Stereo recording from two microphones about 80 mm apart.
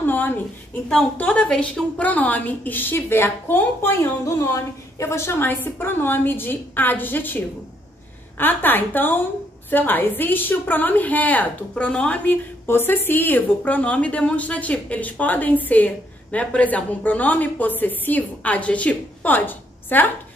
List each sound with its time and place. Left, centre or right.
0.0 s a sound: left
1.1 s a woman's voice: centre
4.3 s a woman's voice: left; by 12.4 s centre
12.6 s a woman's voice: left